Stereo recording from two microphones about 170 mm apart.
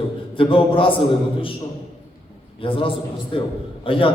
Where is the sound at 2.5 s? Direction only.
30° left (ahead or behind).